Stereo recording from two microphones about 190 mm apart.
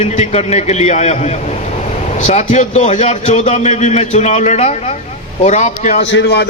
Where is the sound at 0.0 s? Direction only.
35° left (ahead or behind).